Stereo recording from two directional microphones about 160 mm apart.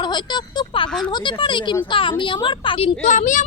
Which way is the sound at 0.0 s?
30° left (ahead or behind).